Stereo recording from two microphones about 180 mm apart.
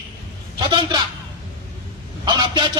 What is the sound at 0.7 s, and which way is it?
Speech, 25° right (ahead or behind).